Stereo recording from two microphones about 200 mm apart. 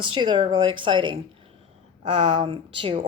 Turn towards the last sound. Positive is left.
turn(degrees=-25)  # may be behind; listen again after turning